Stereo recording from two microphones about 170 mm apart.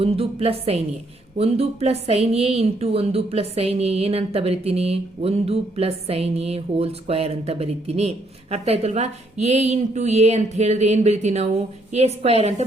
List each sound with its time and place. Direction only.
0.0 s a woman's voice: 35° right (ahead or behind)